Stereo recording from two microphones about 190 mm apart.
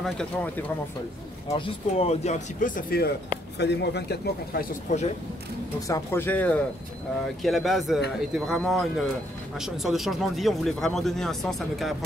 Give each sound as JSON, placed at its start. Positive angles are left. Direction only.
{"t": 0.0, "sound": "speech", "side_deg": 5}
{"t": 1.5, "sound": "speech", "side_deg": 30}
{"t": 3.5, "sound": "a man's voice", "side_deg": 65}
{"t": 4.9, "sound": "speech", "side_deg": 40}
{"t": 5.8, "sound": "speech", "side_deg": 15}